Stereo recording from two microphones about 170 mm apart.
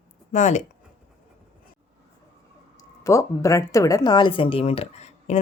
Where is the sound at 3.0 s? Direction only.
20° left (ahead or behind).